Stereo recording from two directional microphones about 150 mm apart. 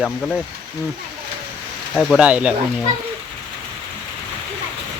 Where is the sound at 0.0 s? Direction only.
10° left (ahead or behind).